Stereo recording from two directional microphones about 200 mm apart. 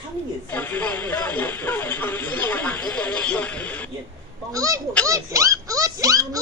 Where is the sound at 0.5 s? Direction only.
10° left (ahead or behind).